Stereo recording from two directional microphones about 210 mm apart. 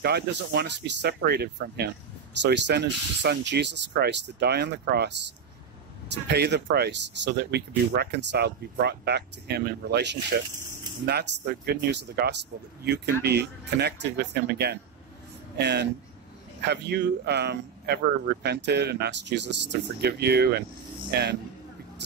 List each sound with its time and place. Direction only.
0.0 s speech: 50° right (ahead or behind)
6.2 s speech: 50° right (ahead or behind)